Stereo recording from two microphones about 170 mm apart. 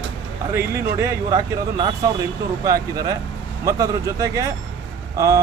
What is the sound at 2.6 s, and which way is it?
Speech, 20° right (ahead or behind).